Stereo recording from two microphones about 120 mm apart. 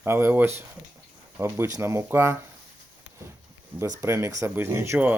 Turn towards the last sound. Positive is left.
turn(degrees=-20)  # may be behind; listen again after turning